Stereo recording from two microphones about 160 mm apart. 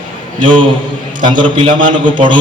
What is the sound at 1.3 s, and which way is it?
A man's voice, 30° right (ahead or behind).